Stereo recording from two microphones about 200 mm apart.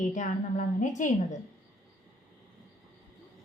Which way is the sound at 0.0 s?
40° left (ahead or behind).